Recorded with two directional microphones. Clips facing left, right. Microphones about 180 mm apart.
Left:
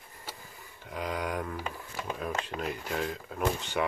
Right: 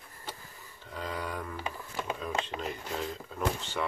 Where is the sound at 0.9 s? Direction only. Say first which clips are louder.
Left 3 dB; 15° left (ahead or behind).